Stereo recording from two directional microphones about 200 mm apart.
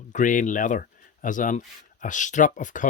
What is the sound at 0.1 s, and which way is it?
Speech, 40° left (ahead or behind).